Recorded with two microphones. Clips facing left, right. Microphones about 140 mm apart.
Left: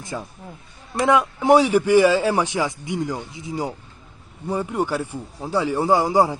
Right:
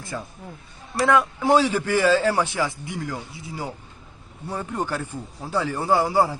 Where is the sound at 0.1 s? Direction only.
10° left (ahead or behind).